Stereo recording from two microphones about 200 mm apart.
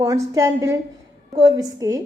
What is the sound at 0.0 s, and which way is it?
A woman's voice, 15° right (ahead or behind).